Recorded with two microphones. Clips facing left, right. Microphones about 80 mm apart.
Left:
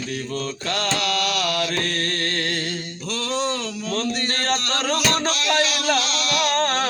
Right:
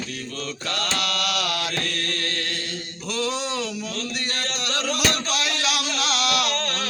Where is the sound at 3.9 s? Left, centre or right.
Left.